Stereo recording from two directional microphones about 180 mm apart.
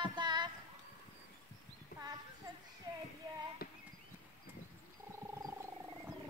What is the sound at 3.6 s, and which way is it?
Horse, 55° left (ahead or behind).